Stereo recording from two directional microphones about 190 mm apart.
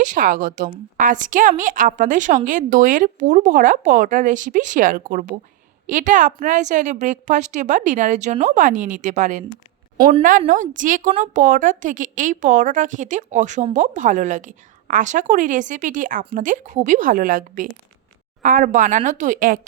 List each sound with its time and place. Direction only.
0.0 s a woman's voice: 45° right (ahead or behind)
10.4 s a woman's voice: 40° right (ahead or behind)